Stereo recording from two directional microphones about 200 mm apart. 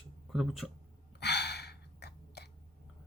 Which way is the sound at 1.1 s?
55° left (ahead or behind).